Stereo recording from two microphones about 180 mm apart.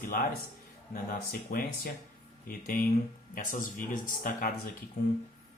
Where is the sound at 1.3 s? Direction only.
50° left (ahead or behind).